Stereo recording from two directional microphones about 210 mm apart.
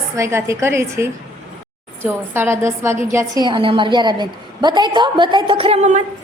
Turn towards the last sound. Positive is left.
turn(degrees=-30)  # may be behind; listen again after turning